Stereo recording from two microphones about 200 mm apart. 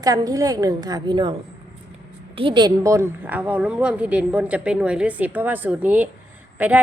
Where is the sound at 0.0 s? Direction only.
20° right (ahead or behind).